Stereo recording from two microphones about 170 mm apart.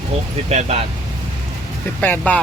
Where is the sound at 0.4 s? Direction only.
40° right (ahead or behind).